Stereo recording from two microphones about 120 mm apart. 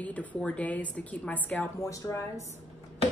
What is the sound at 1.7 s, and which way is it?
Speech, 25° left (ahead or behind).